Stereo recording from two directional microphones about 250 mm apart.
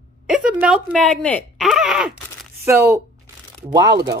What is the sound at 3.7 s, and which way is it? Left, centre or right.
Speech, centre.